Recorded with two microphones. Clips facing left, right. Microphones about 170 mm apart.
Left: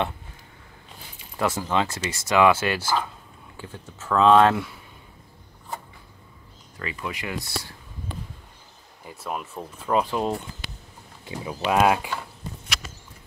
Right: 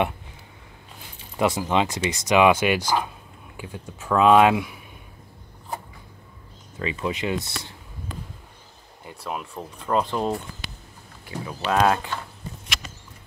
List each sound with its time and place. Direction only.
1.3 s speech: 15° right (ahead or behind)
6.8 s speech: 20° right (ahead or behind)
9.0 s speech: centre (ahead or behind)
11.3 s speech: 20° left (ahead or behind)
11.6 s speech: 10° left (ahead or behind)